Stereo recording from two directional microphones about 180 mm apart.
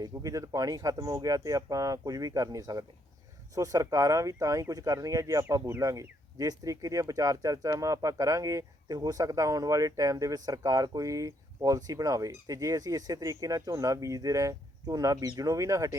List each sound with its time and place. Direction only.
0.0 s speech: 20° right (ahead or behind)